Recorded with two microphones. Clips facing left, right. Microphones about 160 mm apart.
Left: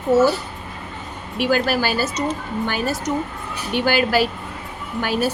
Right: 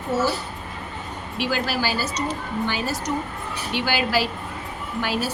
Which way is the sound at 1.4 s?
50° left (ahead or behind).